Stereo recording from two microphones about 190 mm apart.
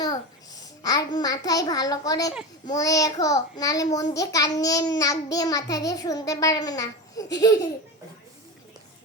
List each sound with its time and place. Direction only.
0.0 s a child's voice: 20° left (ahead or behind)
2.6 s child singing: 20° left (ahead or behind)